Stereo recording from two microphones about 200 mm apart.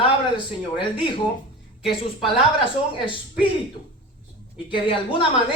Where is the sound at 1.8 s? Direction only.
Centre (ahead or behind).